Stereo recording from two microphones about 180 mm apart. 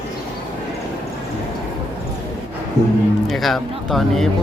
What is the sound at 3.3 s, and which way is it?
Speech, centre (ahead or behind).